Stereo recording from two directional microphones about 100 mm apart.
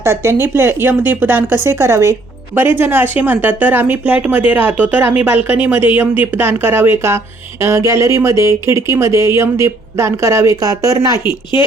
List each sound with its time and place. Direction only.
0.0 s speech: 25° right (ahead or behind)